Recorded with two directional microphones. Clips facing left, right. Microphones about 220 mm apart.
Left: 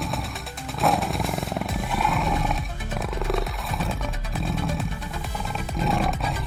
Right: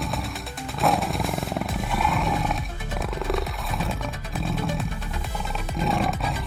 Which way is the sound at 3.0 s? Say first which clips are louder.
Even; centre (ahead or behind).